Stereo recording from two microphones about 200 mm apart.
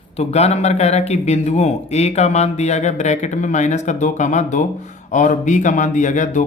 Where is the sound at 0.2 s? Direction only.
30° left (ahead or behind).